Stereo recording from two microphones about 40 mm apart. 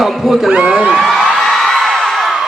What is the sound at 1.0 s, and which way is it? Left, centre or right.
Speech, centre.